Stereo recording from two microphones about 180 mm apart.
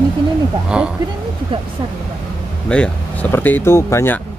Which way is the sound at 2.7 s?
5° left (ahead or behind).